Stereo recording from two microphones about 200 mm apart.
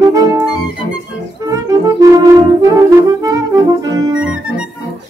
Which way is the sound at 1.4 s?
15° right (ahead or behind).